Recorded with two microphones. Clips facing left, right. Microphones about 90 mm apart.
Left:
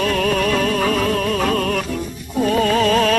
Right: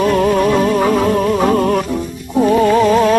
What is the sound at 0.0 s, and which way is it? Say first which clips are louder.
Music: right 6 dB; 25° right (ahead or behind).